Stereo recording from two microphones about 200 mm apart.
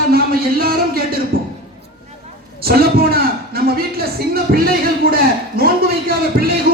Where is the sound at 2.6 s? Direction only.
50° right (ahead or behind).